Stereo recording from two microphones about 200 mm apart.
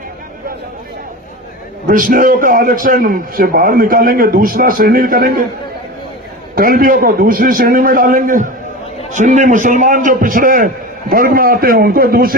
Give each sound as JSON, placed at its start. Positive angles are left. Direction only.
{"t": 1.9, "sound": "a man's voice", "side_deg": -45}
{"t": 6.6, "sound": "a man's voice", "side_deg": -45}